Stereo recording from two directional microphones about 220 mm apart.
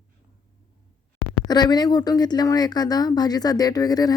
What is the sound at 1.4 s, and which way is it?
Speech, 20° left (ahead or behind).